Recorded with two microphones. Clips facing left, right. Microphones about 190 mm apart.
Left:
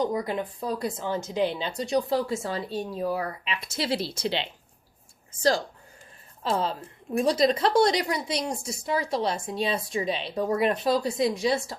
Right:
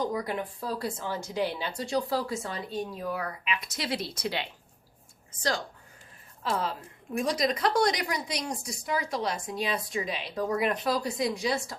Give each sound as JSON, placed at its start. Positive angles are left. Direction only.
{"t": 0.0, "sound": "a woman's voice", "side_deg": 20}